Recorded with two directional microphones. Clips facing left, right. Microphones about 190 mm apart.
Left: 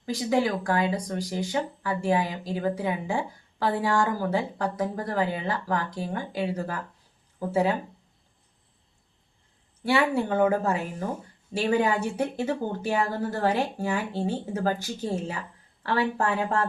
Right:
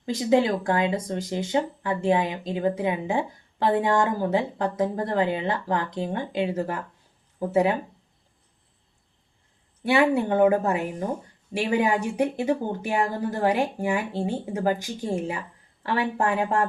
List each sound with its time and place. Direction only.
0.0 s speech: 25° right (ahead or behind)
9.8 s speech: 20° right (ahead or behind)